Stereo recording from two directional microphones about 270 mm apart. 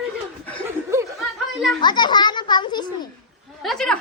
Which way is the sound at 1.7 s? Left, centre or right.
Centre.